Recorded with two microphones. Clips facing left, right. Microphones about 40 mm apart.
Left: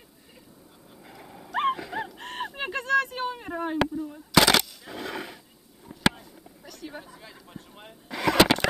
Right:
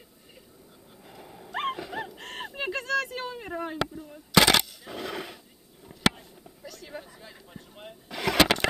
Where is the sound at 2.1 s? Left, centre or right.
Left.